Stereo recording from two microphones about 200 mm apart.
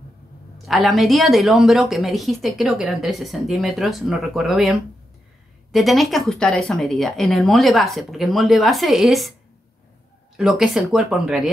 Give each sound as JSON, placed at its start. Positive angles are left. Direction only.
{"t": 0.7, "sound": "speech", "side_deg": 0}
{"t": 5.7, "sound": "speech", "side_deg": 0}
{"t": 10.3, "sound": "speech", "side_deg": 0}